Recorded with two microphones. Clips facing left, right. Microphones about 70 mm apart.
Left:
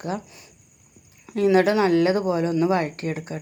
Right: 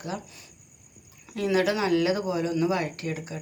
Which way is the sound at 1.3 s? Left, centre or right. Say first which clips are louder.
Left 6 dB; left.